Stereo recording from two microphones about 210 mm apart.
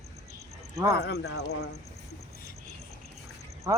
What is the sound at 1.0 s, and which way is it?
Speech, 55° left (ahead or behind).